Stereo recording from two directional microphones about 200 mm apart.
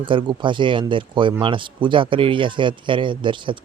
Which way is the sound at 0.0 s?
25° right (ahead or behind).